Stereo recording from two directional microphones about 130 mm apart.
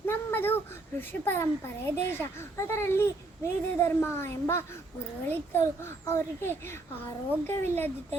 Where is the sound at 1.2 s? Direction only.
15° left (ahead or behind).